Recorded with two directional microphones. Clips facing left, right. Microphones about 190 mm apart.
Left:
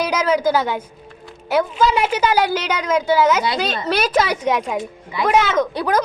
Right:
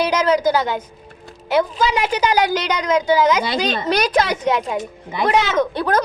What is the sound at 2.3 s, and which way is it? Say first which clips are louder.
A woman's voice: even; 10° left (ahead or behind).